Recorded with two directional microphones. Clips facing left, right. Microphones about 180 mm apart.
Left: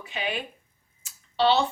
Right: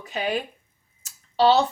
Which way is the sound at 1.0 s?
40° right (ahead or behind).